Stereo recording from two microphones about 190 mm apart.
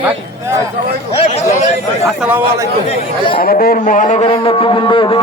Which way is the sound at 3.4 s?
50° left (ahead or behind).